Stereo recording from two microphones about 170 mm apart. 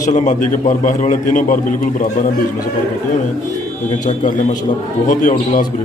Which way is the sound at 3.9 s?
45° left (ahead or behind).